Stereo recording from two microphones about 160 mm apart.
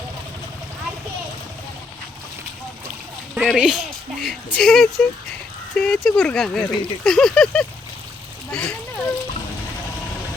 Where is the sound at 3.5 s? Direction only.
5° right (ahead or behind).